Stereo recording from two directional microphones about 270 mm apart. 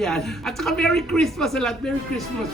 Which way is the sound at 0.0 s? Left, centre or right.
Centre.